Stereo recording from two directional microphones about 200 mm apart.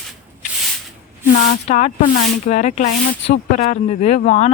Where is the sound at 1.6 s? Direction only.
35° left (ahead or behind).